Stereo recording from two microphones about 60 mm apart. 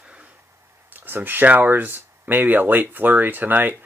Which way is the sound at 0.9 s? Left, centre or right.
Right.